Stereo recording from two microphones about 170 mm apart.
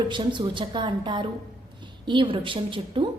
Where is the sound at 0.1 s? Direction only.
30° right (ahead or behind).